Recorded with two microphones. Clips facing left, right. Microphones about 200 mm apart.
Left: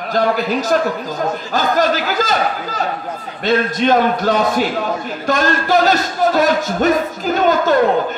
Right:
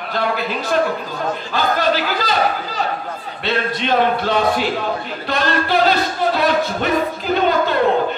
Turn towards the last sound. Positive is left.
turn(degrees=40)  # may be behind; listen again after turning